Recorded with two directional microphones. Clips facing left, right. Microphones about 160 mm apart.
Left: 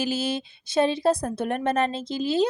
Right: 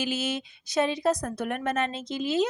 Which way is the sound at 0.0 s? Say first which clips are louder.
Left 3 dB; 35° left (ahead or behind).